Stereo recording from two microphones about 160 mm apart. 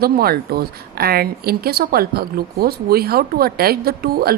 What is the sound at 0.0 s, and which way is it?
Speech, 70° right (ahead or behind).